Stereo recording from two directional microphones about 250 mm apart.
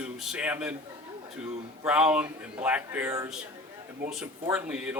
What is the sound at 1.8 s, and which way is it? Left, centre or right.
Speech, centre.